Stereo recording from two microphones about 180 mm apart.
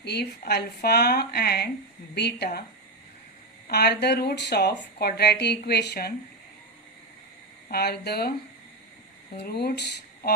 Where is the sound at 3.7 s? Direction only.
65° left (ahead or behind).